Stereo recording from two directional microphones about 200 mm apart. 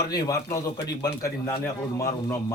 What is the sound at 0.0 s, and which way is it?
Speech, 15° left (ahead or behind).